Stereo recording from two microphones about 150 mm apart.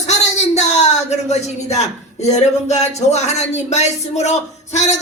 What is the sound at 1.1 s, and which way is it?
Speech, 45° left (ahead or behind).